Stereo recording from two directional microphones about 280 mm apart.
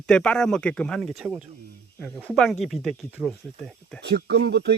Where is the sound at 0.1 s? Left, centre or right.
Centre.